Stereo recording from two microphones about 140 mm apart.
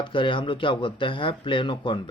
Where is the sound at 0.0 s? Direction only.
35° left (ahead or behind).